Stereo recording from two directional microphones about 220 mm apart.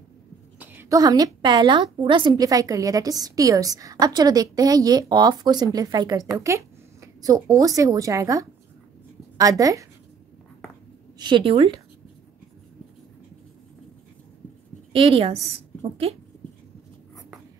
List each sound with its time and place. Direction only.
0.6 s a woman's voice: 10° right (ahead or behind)
11.1 s a woman's voice: 20° right (ahead or behind)
14.9 s a woman's voice: 25° right (ahead or behind)